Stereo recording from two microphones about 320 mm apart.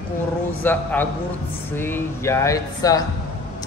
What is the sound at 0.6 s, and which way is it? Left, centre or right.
A man's voice, centre.